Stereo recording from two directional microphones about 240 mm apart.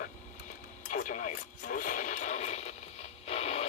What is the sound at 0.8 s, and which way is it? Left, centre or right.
Radio, left.